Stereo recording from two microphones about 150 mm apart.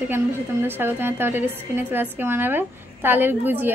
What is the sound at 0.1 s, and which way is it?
A woman's voice, 15° right (ahead or behind).